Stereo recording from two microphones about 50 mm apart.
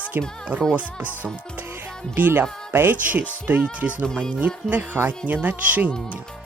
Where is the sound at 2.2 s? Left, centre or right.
Right.